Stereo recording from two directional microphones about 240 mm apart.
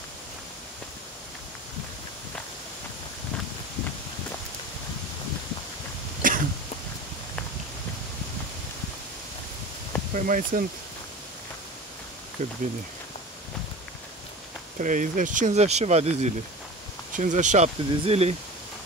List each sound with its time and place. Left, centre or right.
6.2 s cough: right
10.1 s speech: right
12.4 s speech: right
14.8 s speech: right